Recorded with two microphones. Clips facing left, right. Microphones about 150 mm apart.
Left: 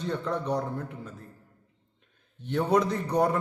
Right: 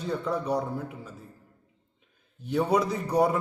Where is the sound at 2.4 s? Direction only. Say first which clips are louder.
Even; 5° right (ahead or behind).